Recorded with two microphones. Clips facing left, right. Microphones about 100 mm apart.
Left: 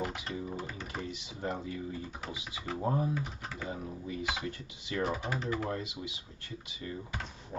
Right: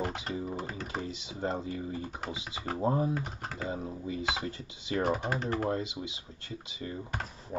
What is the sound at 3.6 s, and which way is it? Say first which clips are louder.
Speech: right 4 dB; 25° right (ahead or behind).